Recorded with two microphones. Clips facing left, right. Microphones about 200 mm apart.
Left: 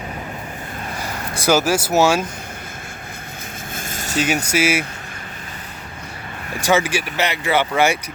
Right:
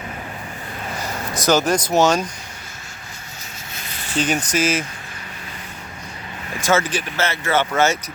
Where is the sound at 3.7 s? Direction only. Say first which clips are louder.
Left 1 dB; 45° left (ahead or behind).